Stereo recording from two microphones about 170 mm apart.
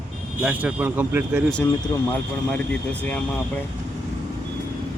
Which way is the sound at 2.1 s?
10° left (ahead or behind).